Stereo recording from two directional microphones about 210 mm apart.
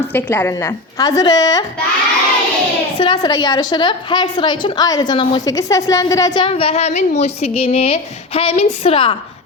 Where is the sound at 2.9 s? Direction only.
20° left (ahead or behind).